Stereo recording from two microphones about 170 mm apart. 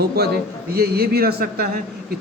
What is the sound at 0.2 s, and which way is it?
A man's voice, 70° right (ahead or behind).